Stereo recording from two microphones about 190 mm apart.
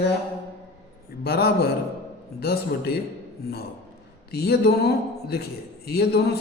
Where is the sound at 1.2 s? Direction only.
55° left (ahead or behind).